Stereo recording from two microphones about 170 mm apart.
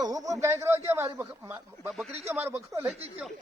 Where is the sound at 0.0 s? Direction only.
20° right (ahead or behind).